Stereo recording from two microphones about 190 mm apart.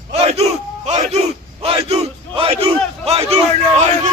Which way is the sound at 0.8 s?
35° right (ahead or behind).